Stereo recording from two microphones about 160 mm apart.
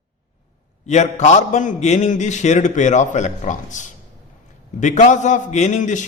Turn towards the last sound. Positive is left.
turn(degrees=50)  # may be behind; listen again after turning